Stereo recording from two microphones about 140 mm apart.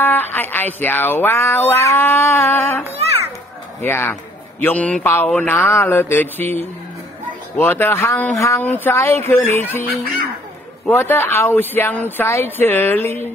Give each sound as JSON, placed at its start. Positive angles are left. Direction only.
{"t": 0.0, "sound": "speech", "side_deg": 15}
{"t": 3.8, "sound": "speech", "side_deg": 15}
{"t": 10.9, "sound": "speech", "side_deg": 15}